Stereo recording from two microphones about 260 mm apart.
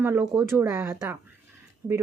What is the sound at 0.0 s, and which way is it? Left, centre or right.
A woman's voice, centre.